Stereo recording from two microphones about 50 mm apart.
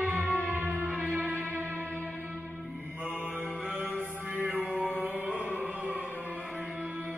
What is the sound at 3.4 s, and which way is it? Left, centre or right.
Mantra, right.